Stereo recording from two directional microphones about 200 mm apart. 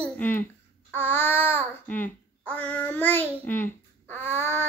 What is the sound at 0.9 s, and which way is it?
Child singing, 10° left (ahead or behind).